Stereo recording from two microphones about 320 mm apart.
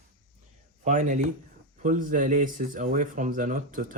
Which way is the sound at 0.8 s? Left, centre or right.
Right.